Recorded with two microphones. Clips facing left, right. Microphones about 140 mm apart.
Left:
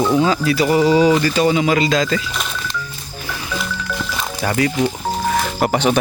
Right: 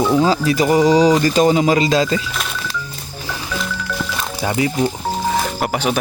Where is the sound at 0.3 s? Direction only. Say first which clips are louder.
Right 1 dB; 35° right (ahead or behind).